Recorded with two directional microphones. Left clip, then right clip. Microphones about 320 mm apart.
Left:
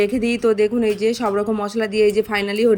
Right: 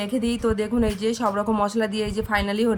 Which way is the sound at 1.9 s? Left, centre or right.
Right.